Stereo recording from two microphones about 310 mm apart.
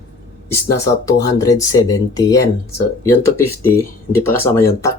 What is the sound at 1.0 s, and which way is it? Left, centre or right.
Speech, centre.